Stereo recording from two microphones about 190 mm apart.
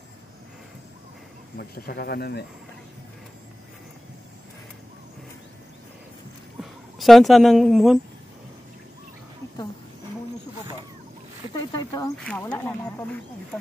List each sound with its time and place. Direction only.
1.6 s speech: 60° left (ahead or behind)
6.6 s speech: centre (ahead or behind)
11.5 s snake: 20° left (ahead or behind)
12.3 s a sound: 10° left (ahead or behind)